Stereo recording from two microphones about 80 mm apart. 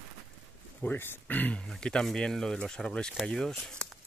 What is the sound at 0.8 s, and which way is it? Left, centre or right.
Speech, left.